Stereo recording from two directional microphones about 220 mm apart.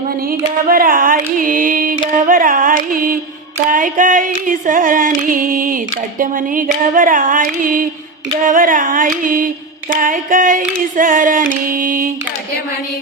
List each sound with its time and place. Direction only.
0.3 s female singing: 40° right (ahead or behind)